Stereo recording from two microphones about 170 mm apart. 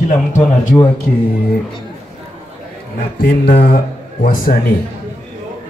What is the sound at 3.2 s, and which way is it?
Speech, 60° left (ahead or behind).